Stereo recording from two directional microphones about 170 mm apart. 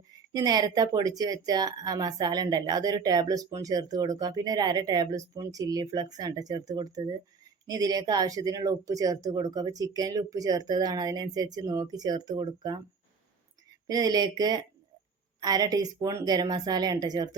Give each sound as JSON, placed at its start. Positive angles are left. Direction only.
{"t": 0.3, "sound": "a woman's voice", "side_deg": -25}
{"t": 13.8, "sound": "a woman's voice", "side_deg": -20}